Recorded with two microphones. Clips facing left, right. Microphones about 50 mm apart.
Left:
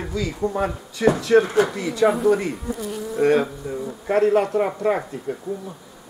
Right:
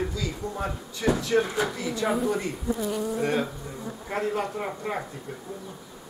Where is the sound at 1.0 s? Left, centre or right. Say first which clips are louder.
Left 7 dB; left.